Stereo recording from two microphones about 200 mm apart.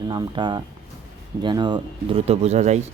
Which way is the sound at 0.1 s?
20° right (ahead or behind).